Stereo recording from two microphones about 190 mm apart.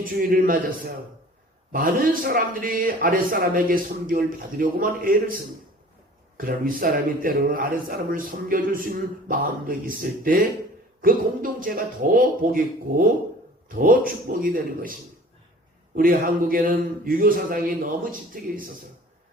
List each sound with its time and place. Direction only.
0.0 s a man's voice: 45° right (ahead or behind)
1.7 s a man's voice: 50° right (ahead or behind)
6.3 s a man's voice: 50° right (ahead or behind)
16.0 s a man's voice: 50° right (ahead or behind)